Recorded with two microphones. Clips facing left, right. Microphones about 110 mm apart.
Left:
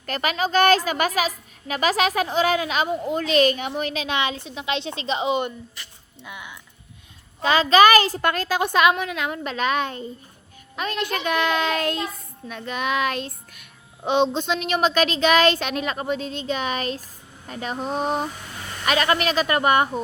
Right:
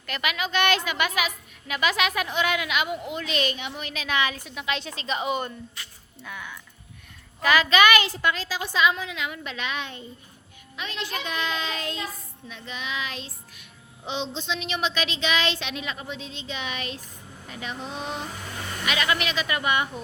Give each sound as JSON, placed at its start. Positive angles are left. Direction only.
{"t": 0.0, "sound": "a woman's voice", "side_deg": 40}
{"t": 7.4, "sound": "a child's voice", "side_deg": 30}